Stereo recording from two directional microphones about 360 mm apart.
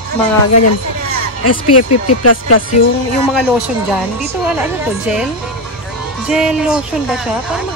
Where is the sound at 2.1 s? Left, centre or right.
Left.